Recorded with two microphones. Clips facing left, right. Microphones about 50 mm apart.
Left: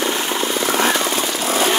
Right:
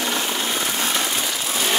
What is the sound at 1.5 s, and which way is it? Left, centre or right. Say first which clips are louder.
Jackhammer: left 8 dB; left.